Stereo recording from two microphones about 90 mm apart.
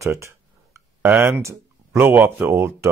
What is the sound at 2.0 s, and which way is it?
Speech, 25° right (ahead or behind).